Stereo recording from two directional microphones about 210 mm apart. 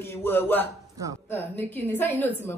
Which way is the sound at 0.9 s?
15° right (ahead or behind).